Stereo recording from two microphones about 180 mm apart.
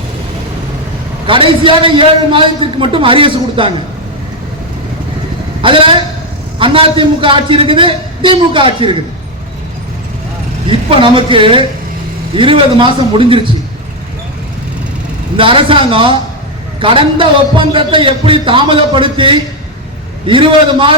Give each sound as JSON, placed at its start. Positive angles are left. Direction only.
{"t": 1.3, "sound": "a man's voice", "side_deg": -30}
{"t": 5.6, "sound": "a man's voice", "side_deg": -30}
{"t": 10.7, "sound": "a man's voice", "side_deg": -30}
{"t": 15.4, "sound": "a man's voice", "side_deg": -30}